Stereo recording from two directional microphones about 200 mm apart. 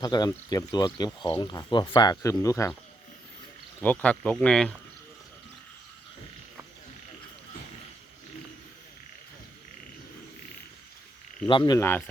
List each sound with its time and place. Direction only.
0.0 s speech: 20° left (ahead or behind)
3.8 s speech: 5° left (ahead or behind)
11.4 s speech: 20° left (ahead or behind)